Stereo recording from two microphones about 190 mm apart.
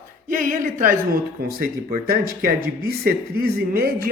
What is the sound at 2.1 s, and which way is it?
Speech, 50° right (ahead or behind).